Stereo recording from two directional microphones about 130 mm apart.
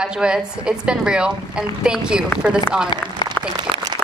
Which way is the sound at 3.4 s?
10° left (ahead or behind).